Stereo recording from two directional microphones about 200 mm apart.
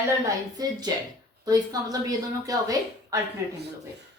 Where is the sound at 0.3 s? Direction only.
20° right (ahead or behind).